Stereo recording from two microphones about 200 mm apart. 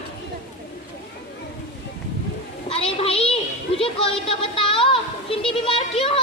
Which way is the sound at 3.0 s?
30° left (ahead or behind).